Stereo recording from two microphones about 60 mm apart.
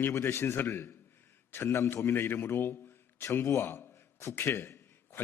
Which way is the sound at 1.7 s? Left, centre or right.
Left.